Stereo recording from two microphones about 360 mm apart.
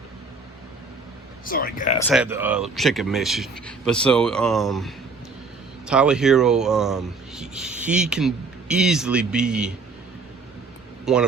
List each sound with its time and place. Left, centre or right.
1.5 s speech: left
2.0 s speech: centre
11.0 s speech: centre